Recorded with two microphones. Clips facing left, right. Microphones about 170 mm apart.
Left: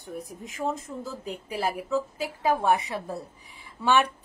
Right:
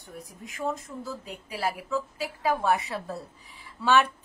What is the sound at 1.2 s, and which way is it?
A woman's voice, 20° left (ahead or behind).